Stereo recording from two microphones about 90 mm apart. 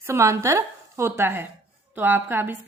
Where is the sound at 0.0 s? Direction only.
30° right (ahead or behind).